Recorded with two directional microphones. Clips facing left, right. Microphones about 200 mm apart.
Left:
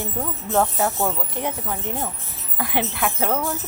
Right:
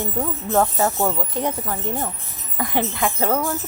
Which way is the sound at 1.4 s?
20° right (ahead or behind).